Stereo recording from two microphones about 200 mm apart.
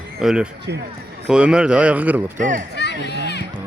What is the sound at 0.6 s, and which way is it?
Speech, 55° right (ahead or behind).